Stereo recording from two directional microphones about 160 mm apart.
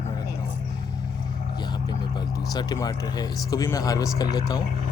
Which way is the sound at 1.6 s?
30° left (ahead or behind).